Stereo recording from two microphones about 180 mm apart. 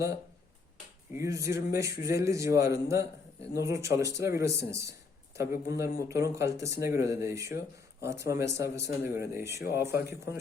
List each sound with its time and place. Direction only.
1.1 s speech: 15° right (ahead or behind)